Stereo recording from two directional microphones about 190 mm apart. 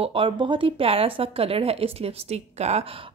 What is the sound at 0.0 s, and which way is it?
A woman's voice, 30° right (ahead or behind).